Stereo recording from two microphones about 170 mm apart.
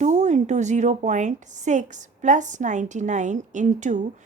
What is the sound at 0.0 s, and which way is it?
A woman's voice, 45° right (ahead or behind).